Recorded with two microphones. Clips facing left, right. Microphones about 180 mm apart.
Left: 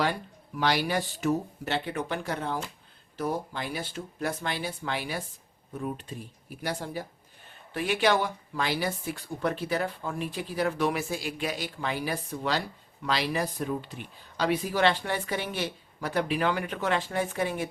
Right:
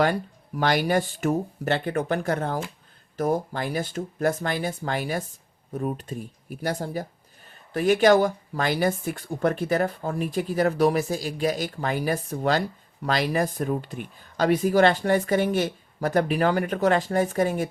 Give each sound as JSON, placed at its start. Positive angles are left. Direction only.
{"t": 0.0, "sound": "speech", "side_deg": -45}